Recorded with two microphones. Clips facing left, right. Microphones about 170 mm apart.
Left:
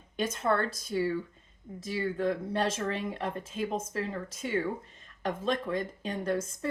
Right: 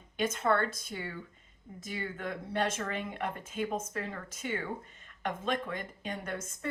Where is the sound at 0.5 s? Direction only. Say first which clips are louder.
Left 2 dB; 35° left (ahead or behind).